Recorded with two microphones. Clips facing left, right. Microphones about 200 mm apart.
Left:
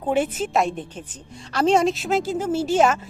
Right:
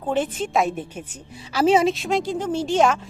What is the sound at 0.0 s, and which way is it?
A woman's voice, 10° left (ahead or behind).